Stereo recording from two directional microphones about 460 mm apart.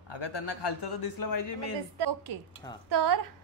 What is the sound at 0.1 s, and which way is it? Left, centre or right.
A man's voice, left.